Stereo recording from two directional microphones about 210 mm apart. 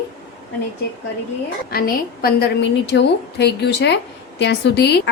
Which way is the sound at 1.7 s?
45° left (ahead or behind).